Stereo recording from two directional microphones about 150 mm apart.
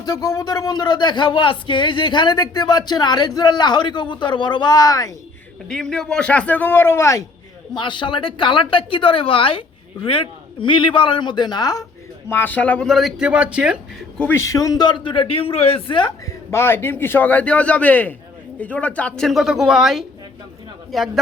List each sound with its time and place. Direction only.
0.0 s speech: 25° left (ahead or behind)
5.6 s a man's voice: 5° left (ahead or behind)
7.7 s a woman's voice: 30° left (ahead or behind)
12.3 s speech: 15° left (ahead or behind); by 13.7 s 5° right (ahead or behind)
14.2 s a woman's voice: 15° left (ahead or behind); by 16.1 s 35° left (ahead or behind)
16.5 s a man's voice: 15° left (ahead or behind); by 20.1 s centre (ahead or behind)